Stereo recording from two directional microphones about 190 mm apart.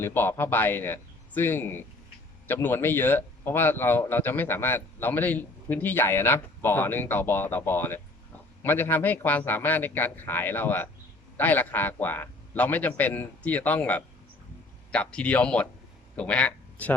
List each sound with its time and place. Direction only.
0.0 s a man's voice: 10° left (ahead or behind)